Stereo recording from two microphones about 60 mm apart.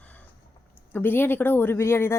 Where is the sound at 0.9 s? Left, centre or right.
Left.